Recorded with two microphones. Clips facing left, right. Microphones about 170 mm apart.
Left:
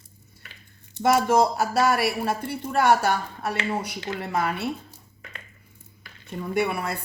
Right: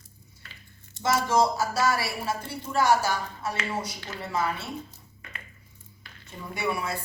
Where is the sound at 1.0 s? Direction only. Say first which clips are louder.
Left 4 dB; 60° left (ahead or behind).